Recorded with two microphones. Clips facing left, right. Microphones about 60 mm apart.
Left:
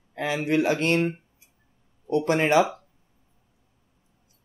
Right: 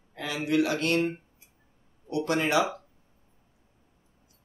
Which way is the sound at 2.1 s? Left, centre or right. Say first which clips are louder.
Left 5 dB; left.